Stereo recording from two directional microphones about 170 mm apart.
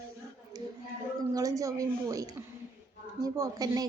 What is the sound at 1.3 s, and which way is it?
A woman's voice, 20° right (ahead or behind).